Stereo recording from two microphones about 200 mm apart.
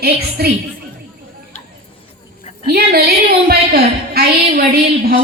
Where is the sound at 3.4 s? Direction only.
50° right (ahead or behind).